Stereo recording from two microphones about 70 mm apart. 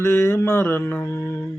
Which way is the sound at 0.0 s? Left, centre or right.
Left.